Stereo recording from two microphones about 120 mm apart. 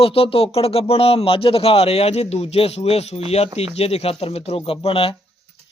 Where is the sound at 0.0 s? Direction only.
50° left (ahead or behind).